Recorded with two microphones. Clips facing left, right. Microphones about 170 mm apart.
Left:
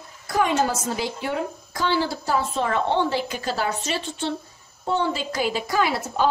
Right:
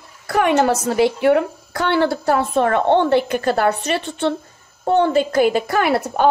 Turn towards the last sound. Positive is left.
turn(degrees=-60)  # may be behind; listen again after turning